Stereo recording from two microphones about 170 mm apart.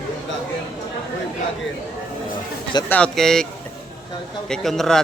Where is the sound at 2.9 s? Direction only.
5° left (ahead or behind).